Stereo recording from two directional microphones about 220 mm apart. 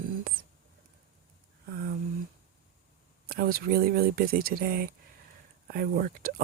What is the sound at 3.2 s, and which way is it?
Speech, 45° right (ahead or behind).